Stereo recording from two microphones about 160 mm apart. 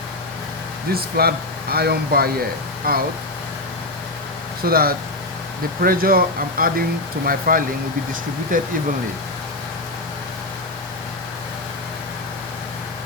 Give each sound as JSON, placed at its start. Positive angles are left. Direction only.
{"t": 0.9, "sound": "speech", "side_deg": -75}
{"t": 4.6, "sound": "speech", "side_deg": -70}